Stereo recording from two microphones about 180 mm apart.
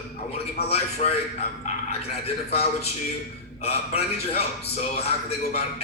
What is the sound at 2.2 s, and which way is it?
A man's voice, 35° left (ahead or behind).